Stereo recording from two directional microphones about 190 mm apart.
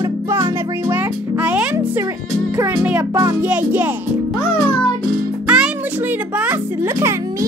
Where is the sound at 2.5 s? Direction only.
15° right (ahead or behind).